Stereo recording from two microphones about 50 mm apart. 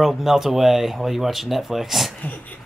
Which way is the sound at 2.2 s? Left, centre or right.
Left.